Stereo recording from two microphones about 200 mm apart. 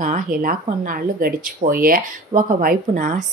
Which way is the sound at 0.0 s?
40° right (ahead or behind).